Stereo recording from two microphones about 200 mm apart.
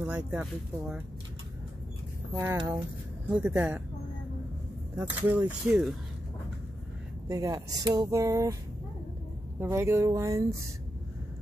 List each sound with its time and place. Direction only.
0.3 s speech: 5° right (ahead or behind)
2.3 s speech: 10° right (ahead or behind)
4.9 s speech: 10° right (ahead or behind)
7.2 s speech: 15° right (ahead or behind)
9.6 s speech: 15° right (ahead or behind)